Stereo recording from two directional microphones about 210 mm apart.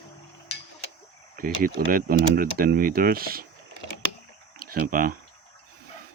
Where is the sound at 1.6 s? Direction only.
40° right (ahead or behind).